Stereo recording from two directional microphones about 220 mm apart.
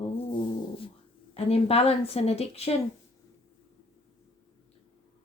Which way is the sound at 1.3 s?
25° left (ahead or behind).